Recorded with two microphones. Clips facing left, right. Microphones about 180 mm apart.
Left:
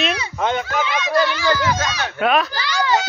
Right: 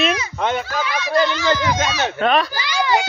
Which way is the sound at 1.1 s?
20° right (ahead or behind).